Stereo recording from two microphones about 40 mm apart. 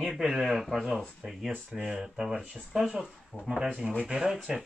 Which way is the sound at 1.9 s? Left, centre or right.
Centre.